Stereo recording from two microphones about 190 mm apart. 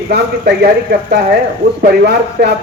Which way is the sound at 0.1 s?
55° right (ahead or behind).